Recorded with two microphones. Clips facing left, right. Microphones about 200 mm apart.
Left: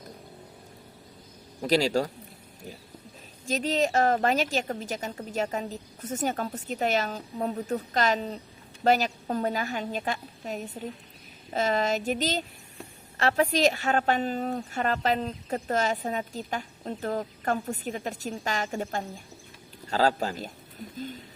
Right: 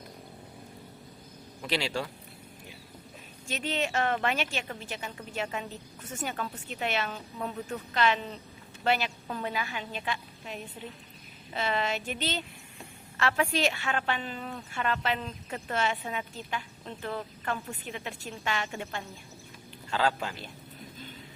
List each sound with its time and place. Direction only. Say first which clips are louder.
1.6 s a woman's voice: left 8 dB; 40° left (ahead or behind)
3.4 s a woman's voice: left 6 dB; 40° left (ahead or behind)